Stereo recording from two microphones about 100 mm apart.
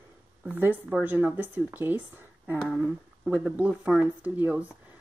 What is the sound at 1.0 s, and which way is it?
Speech, 20° right (ahead or behind).